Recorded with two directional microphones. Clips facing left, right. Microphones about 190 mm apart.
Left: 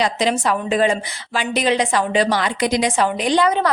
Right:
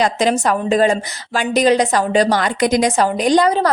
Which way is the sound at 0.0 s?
45° right (ahead or behind).